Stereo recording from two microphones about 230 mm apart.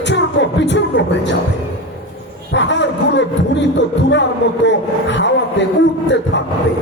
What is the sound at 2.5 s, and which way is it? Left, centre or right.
Speech, left.